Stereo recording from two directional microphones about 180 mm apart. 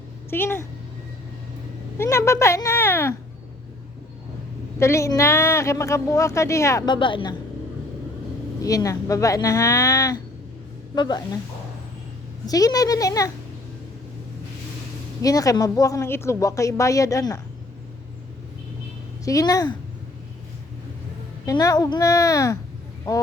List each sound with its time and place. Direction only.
0.3 s a woman's voice: 10° left (ahead or behind)
2.0 s a woman's voice: 15° left (ahead or behind)
4.8 s a woman's voice: 15° left (ahead or behind)
8.6 s a woman's voice: 20° left (ahead or behind)
12.5 s a woman's voice: 20° left (ahead or behind)
15.2 s a woman's voice: 20° left (ahead or behind)
19.2 s a woman's voice: 20° left (ahead or behind)
21.4 s a woman's voice: 20° left (ahead or behind)